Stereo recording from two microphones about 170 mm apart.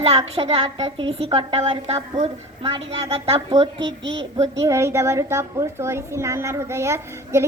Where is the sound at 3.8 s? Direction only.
90° right.